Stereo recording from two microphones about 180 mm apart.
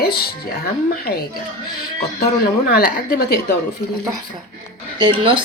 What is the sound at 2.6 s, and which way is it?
Speech, 60° left (ahead or behind).